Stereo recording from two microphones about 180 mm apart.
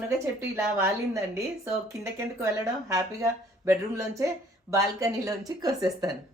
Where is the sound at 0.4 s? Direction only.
15° right (ahead or behind).